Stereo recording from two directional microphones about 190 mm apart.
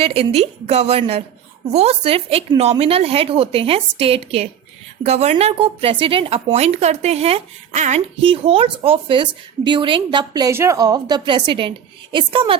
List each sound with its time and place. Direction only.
0.0 s speech: 30° right (ahead or behind)